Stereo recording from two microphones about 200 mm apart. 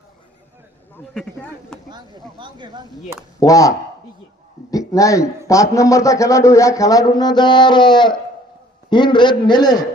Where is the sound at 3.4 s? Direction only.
15° left (ahead or behind).